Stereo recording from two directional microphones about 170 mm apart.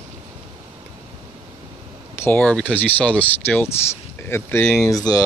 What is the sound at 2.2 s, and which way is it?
Speech, 10° left (ahead or behind).